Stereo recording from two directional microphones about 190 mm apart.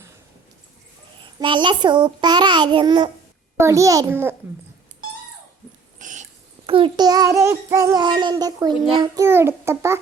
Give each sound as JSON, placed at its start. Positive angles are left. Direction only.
{"t": 1.2, "sound": "child singing", "side_deg": -25}
{"t": 3.6, "sound": "a child's voice", "side_deg": -15}
{"t": 6.0, "sound": "dog", "side_deg": -40}
{"t": 6.7, "sound": "child singing", "side_deg": -25}
{"t": 9.2, "sound": "a child's voice", "side_deg": -10}